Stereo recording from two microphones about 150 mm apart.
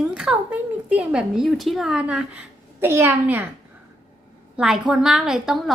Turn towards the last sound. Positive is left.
turn(degrees=0)  # may be behind; listen again after turning